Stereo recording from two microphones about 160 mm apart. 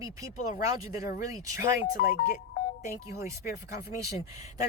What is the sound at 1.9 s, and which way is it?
Speech, 55° left (ahead or behind).